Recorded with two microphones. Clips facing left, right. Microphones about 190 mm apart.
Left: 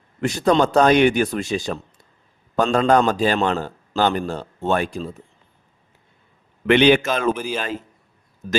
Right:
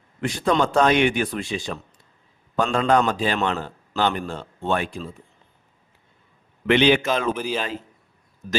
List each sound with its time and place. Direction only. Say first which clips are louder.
0.2 s a man's voice: left 4 dB; 40° left (ahead or behind)
6.7 s a man's voice: left 3 dB; 55° left (ahead or behind)
7.3 s a man's voice: even; 5° left (ahead or behind)